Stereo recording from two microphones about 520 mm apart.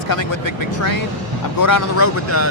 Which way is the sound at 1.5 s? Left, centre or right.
Left.